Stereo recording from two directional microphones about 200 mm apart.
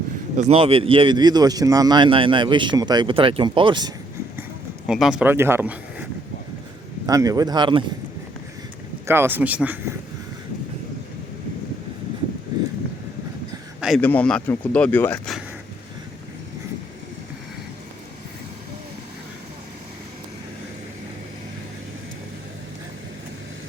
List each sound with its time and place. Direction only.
0.3 s speech: 30° right (ahead or behind)
4.9 s speech: centre (ahead or behind)
7.1 s speech: 15° right (ahead or behind)
9.0 s speech: 10° right (ahead or behind)
13.8 s speech: 5° left (ahead or behind)